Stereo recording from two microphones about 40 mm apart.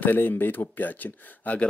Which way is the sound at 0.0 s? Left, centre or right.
Left.